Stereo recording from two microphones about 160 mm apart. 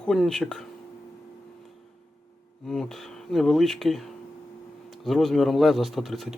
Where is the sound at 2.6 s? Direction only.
5° left (ahead or behind).